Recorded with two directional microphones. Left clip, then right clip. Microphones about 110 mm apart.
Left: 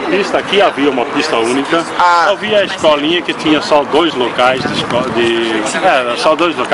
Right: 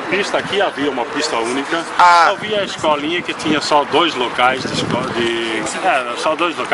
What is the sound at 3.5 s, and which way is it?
Speech, 15° right (ahead or behind).